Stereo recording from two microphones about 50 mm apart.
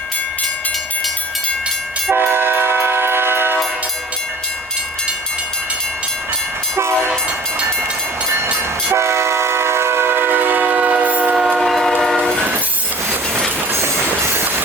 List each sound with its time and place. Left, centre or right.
2.0 s train: right
8.9 s train: right
11.3 s train: centre
11.7 s train: centre
13.7 s train: right